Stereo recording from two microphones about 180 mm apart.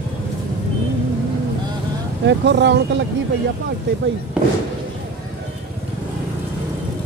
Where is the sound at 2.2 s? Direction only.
75° right (ahead or behind).